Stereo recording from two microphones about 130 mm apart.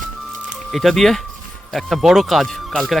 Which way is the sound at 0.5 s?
Centre (ahead or behind).